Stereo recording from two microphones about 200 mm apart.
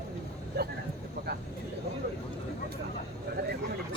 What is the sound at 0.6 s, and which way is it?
Vehicle, 55° right (ahead or behind).